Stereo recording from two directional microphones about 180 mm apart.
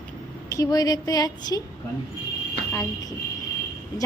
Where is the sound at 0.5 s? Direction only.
20° left (ahead or behind).